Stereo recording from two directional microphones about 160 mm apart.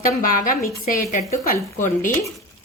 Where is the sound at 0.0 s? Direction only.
60° left (ahead or behind).